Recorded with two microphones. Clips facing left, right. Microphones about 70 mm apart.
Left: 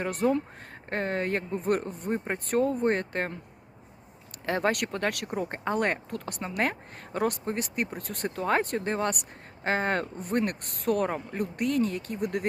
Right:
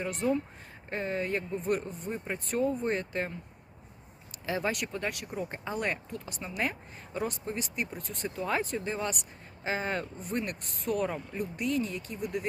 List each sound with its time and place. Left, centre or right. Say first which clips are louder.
0.0 s speech: left 4 dB; left
4.4 s speech: left 5 dB; left